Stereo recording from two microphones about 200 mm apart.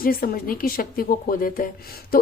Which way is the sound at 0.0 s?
45° left (ahead or behind).